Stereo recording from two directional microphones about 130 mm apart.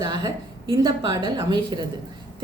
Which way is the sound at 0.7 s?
30° right (ahead or behind).